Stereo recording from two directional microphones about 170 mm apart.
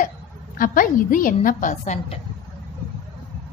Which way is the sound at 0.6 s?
55° left (ahead or behind).